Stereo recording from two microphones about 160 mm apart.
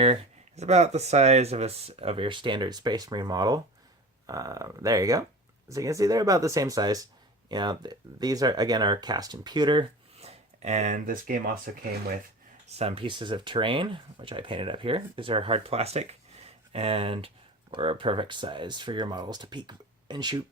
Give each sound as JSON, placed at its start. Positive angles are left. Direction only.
{"t": 0.0, "sound": "speech", "side_deg": -40}
{"t": 12.8, "sound": "speech", "side_deg": -35}